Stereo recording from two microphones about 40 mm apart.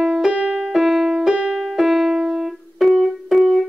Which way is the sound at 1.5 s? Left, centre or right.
Centre.